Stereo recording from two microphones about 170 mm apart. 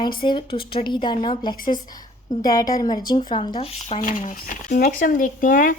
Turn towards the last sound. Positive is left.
turn(degrees=50)  # may be behind; listen again after turning